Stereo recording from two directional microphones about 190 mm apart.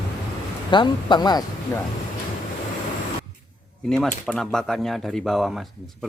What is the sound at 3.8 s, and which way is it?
Speech, 5° left (ahead or behind).